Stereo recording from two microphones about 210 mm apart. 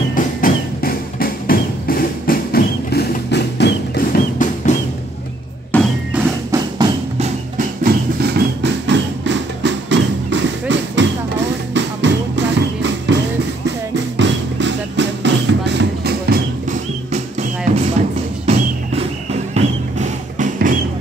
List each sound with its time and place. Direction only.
0.1 s music: 40° left (ahead or behind)
5.7 s music: 10° left (ahead or behind)
6.1 s music: 15° right (ahead or behind)
7.2 s music: 30° right (ahead or behind)
7.8 s music: 50° right (ahead or behind)
19.5 s music: 35° right (ahead or behind)